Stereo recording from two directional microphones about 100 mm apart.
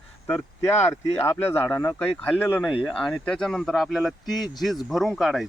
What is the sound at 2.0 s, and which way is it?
Speech, 10° left (ahead or behind).